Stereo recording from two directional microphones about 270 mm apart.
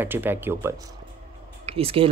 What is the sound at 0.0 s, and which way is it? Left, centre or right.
Speech, centre.